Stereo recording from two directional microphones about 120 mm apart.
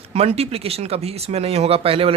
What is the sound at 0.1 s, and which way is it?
Speech, 60° right (ahead or behind).